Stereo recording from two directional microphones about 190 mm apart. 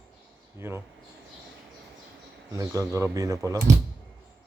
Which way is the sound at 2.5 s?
15° right (ahead or behind).